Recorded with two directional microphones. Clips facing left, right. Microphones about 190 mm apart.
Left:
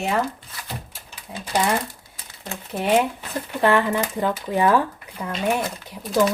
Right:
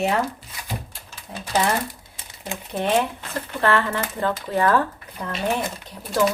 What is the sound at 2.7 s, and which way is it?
Speech, 10° left (ahead or behind).